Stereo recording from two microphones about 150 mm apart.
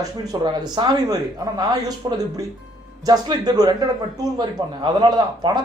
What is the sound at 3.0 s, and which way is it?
A man's voice, 25° right (ahead or behind).